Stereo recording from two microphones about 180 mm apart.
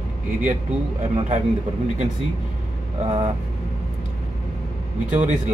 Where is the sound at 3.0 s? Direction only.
35° right (ahead or behind).